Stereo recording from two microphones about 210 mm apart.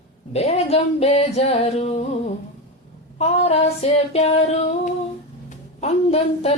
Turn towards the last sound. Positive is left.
turn(degrees=30)  # may be behind; listen again after turning